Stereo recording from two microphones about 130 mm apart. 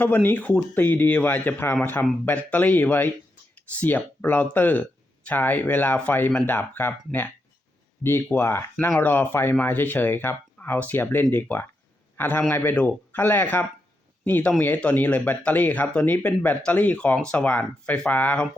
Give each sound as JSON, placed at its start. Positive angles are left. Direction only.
{"t": 0.0, "sound": "speech", "side_deg": 15}